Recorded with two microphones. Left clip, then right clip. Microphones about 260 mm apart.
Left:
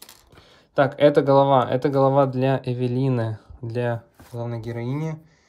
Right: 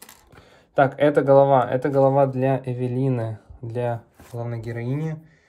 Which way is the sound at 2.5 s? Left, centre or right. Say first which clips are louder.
Left 1 dB; left.